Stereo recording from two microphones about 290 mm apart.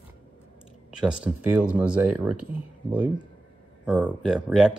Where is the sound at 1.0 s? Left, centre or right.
Centre.